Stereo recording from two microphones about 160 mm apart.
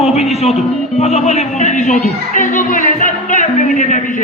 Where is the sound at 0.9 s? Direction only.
40° left (ahead or behind).